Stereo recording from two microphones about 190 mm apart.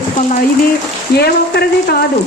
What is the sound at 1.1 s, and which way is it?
Speech, 55° left (ahead or behind).